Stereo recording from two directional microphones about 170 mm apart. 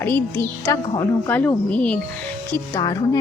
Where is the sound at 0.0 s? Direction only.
15° left (ahead or behind).